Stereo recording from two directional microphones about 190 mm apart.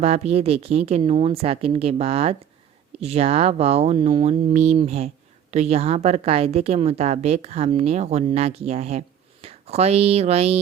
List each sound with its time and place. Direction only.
0.0 s speech: 35° right (ahead or behind)